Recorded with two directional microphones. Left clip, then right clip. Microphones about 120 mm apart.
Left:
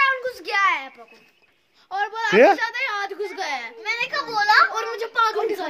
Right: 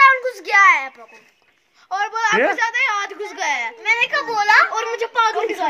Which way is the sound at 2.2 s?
25° left (ahead or behind).